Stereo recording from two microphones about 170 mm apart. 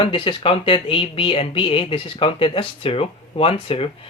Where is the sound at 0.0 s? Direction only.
30° left (ahead or behind).